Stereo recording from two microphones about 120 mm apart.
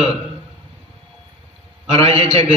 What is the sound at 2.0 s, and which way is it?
Speech, 60° right (ahead or behind).